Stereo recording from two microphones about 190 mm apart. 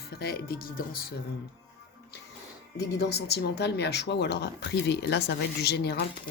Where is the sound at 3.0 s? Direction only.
60° left (ahead or behind).